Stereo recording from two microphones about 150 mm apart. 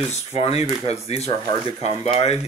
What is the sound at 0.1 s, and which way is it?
Speech, 50° left (ahead or behind).